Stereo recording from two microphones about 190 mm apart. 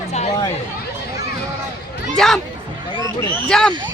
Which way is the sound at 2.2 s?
5° left (ahead or behind).